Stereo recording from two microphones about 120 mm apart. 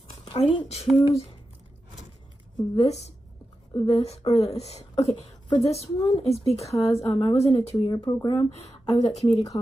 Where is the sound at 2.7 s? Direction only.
65° left (ahead or behind).